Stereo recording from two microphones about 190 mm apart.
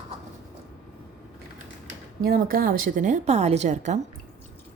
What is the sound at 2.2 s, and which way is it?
A woman's voice, 50° right (ahead or behind).